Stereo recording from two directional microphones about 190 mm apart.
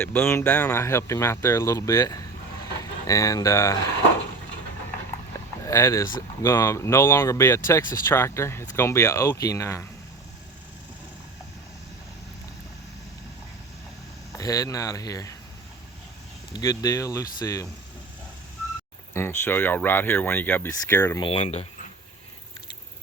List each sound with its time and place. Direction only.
0.0 s speech: 10° left (ahead or behind)
5.6 s speech: 15° left (ahead or behind)
14.3 s speech: 15° left (ahead or behind)
16.5 s speech: 20° left (ahead or behind)
19.1 s speech: 15° left (ahead or behind)
21.2 s speech: 30° left (ahead or behind)